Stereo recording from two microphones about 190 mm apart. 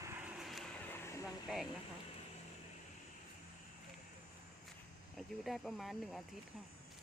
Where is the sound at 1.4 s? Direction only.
5° right (ahead or behind).